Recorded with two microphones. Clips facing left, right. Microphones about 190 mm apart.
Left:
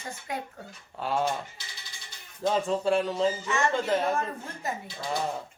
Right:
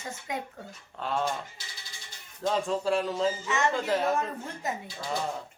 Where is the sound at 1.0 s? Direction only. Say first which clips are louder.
Left 2 dB; 5° left (ahead or behind).